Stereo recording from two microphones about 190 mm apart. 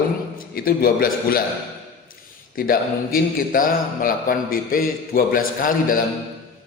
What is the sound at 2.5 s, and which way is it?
Speech, 50° left (ahead or behind).